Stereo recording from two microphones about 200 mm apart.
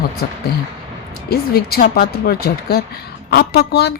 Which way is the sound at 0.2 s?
55° left (ahead or behind).